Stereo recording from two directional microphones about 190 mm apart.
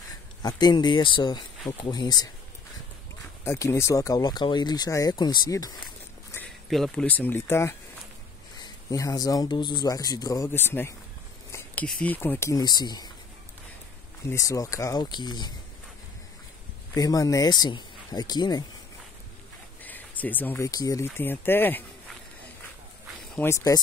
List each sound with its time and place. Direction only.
0.4 s speech: 20° left (ahead or behind)
3.4 s speech: 15° left (ahead or behind)
6.3 s speech: 5° left (ahead or behind); by 13.1 s 20° left (ahead or behind)
14.2 s speech: 15° left (ahead or behind)
16.9 s speech: 20° left (ahead or behind)
19.8 s speech: 10° left (ahead or behind)
23.3 s speech: 15° left (ahead or behind)